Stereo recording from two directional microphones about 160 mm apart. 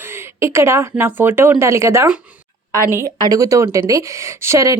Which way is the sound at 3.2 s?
20° right (ahead or behind).